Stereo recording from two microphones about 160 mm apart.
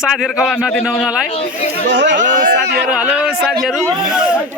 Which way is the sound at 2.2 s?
75° right (ahead or behind).